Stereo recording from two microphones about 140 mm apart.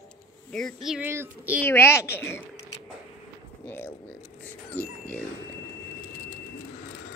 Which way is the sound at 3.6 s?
15° left (ahead or behind).